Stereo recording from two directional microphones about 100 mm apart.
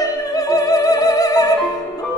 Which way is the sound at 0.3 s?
40° left (ahead or behind).